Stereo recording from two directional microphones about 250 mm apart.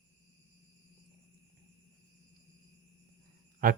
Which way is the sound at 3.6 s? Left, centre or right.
Right.